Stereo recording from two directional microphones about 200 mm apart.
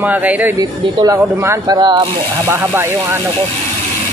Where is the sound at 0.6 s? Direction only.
20° right (ahead or behind).